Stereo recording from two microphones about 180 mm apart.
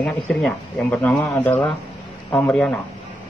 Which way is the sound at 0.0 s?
5° left (ahead or behind).